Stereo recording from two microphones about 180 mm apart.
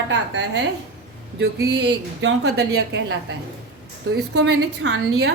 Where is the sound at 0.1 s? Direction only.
85° right.